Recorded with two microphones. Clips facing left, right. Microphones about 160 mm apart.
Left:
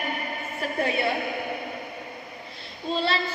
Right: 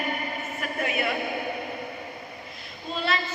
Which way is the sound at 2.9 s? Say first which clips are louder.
Left 2 dB; 30° left (ahead or behind).